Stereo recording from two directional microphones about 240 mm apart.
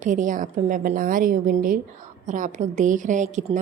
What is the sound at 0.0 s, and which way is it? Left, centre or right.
A woman's voice, right.